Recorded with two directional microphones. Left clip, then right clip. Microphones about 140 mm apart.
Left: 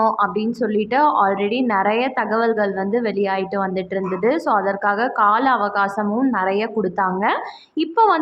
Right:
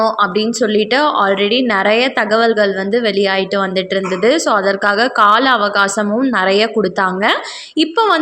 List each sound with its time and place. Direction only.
0.0 s a woman's voice: 30° right (ahead or behind)